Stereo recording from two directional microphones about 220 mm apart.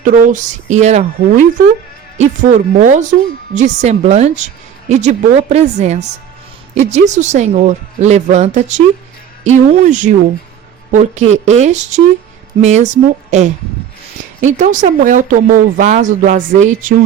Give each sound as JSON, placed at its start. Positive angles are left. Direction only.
{"t": 0.0, "sound": "speech", "side_deg": -35}